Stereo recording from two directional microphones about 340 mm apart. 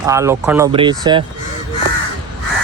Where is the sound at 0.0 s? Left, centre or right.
Centre.